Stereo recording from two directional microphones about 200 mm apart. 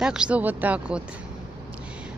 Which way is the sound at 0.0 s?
5° right (ahead or behind).